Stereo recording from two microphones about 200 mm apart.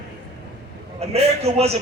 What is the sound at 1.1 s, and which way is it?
Speech, 30° right (ahead or behind).